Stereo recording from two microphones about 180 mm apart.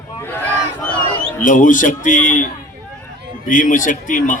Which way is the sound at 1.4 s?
45° left (ahead or behind).